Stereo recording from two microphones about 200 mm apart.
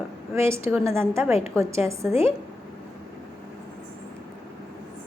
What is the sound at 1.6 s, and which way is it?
Speech, 30° left (ahead or behind).